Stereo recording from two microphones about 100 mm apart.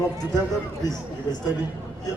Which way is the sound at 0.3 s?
40° left (ahead or behind).